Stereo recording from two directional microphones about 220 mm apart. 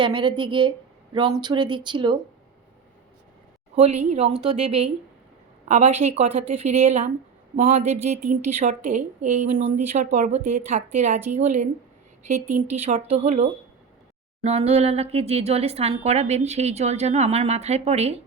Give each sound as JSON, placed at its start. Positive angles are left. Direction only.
{"t": 0.0, "sound": "speech", "side_deg": -20}
{"t": 3.8, "sound": "speech", "side_deg": -30}